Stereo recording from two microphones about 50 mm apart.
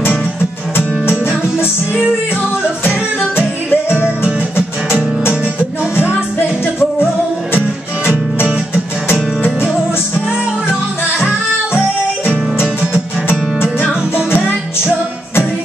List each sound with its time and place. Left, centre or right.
3.2 s music: left
4.0 s music: right
10.7 s music: centre
13.3 s music: left